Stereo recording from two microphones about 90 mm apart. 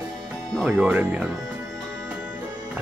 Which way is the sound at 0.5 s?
5° left (ahead or behind).